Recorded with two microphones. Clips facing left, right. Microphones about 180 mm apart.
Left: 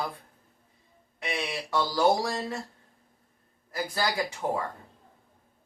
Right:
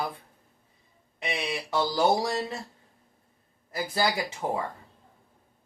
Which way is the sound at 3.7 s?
20° right (ahead or behind).